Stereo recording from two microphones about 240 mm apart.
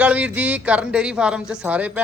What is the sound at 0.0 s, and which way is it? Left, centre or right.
Speech, centre.